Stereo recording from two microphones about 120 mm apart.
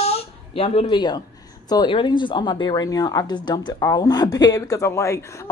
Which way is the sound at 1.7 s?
40° left (ahead or behind).